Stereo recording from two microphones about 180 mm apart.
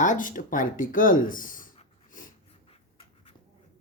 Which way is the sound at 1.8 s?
50° left (ahead or behind).